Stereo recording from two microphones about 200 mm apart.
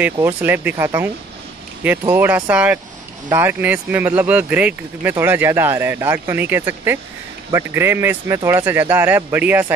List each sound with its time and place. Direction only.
0.0 s speech: 10° right (ahead or behind)